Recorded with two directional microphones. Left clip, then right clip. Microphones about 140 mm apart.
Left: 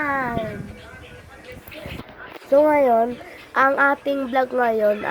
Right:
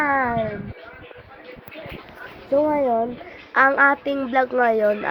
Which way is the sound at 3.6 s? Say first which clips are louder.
Right 1 dB; 25° left (ahead or behind).